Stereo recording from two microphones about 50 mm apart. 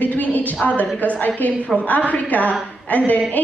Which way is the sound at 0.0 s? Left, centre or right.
Left.